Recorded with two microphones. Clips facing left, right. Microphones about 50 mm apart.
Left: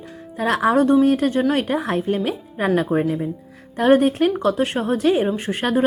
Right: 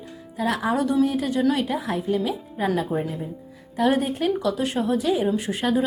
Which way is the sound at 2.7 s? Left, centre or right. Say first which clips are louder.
Left 6 dB; left.